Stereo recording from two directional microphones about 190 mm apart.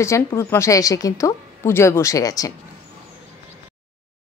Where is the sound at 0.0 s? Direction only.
15° left (ahead or behind).